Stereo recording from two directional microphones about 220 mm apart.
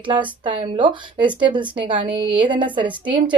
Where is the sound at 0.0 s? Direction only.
20° right (ahead or behind).